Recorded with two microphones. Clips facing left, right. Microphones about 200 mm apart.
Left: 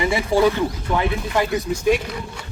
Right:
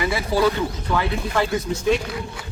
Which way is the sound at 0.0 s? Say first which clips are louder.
Left 3 dB; 20° left (ahead or behind).